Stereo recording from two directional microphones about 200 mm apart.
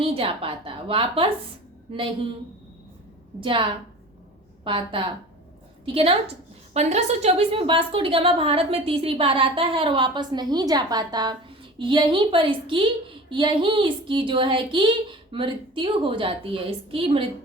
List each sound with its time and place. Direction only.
0.0 s a woman's voice: 30° right (ahead or behind)
3.4 s a woman's voice: 25° right (ahead or behind)